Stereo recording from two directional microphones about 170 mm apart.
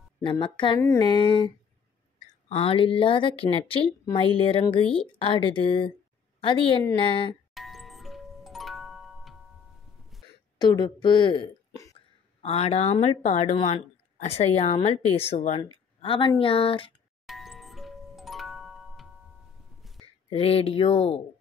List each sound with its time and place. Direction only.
0.2 s a woman's voice: 30° left (ahead or behind)
0.7 s a sound: 15° left (ahead or behind)
1.0 s a woman's voice: 30° left (ahead or behind)
2.5 s a woman's voice: 35° left (ahead or behind)
7.5 s music: centre (ahead or behind)
10.6 s a woman's voice: 25° left (ahead or behind)
12.4 s a woman's voice: 35° left (ahead or behind)
17.3 s music: centre (ahead or behind)
20.2 s a woman's voice: 35° left (ahead or behind)